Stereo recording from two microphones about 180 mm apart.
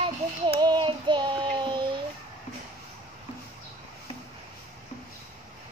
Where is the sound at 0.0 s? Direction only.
25° right (ahead or behind).